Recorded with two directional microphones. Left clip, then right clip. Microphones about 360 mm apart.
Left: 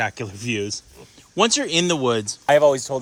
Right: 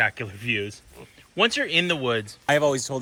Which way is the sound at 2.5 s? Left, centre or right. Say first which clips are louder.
Left 6 dB; centre.